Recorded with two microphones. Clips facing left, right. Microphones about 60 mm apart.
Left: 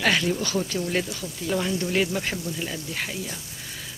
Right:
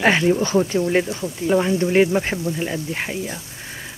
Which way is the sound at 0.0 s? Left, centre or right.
Right.